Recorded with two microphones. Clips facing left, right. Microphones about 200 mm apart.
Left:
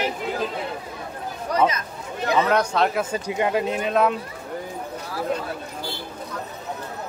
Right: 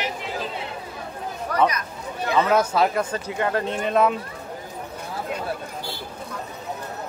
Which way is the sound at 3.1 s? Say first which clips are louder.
Left 2 dB; 15° left (ahead or behind).